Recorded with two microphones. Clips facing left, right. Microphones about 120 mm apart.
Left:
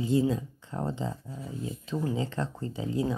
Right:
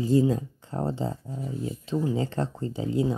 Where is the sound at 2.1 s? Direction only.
35° right (ahead or behind).